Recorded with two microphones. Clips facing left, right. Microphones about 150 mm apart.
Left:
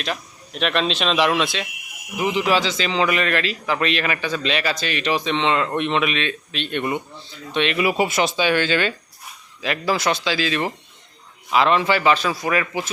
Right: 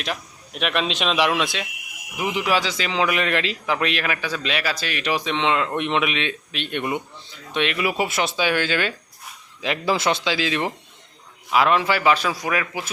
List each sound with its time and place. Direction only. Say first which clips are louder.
0.0 s a man's voice: left 1 dB; 10° right (ahead or behind)
3.8 s a man's voice: left 2 dB; 5° right (ahead or behind)
9.6 s speech: even; 20° right (ahead or behind)
11.5 s a man's voice: left 1 dB; 5° right (ahead or behind)